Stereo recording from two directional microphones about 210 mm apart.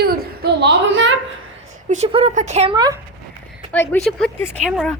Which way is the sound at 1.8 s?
30° right (ahead or behind).